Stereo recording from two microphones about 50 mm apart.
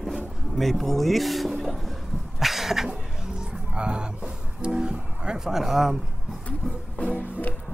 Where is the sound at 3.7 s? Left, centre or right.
Centre.